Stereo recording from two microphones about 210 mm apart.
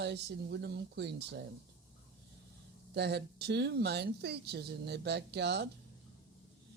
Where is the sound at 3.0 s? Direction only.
50° right (ahead or behind).